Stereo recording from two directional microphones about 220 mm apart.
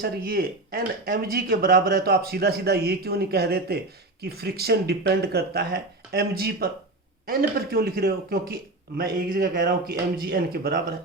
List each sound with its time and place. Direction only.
0.0 s speech: 45° right (ahead or behind)